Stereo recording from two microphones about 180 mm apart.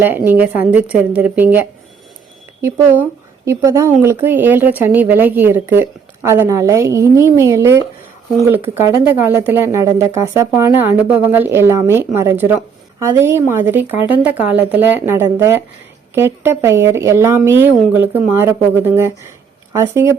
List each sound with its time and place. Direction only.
0.0 s speech: 10° right (ahead or behind)